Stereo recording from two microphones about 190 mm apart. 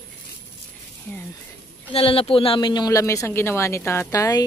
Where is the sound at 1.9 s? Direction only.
30° left (ahead or behind).